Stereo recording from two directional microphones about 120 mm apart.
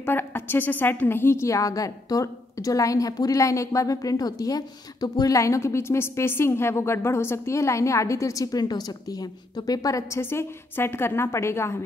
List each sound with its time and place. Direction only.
0.0 s a woman's voice: 15° left (ahead or behind)